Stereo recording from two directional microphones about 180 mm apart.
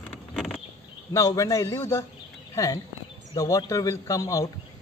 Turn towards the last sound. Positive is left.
turn(degrees=20)  # may be behind; listen again after turning